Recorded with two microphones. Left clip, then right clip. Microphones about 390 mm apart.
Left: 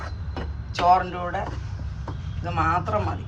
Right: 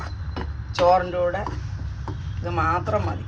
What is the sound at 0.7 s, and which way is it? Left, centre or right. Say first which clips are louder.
Speech: right 1 dB; centre.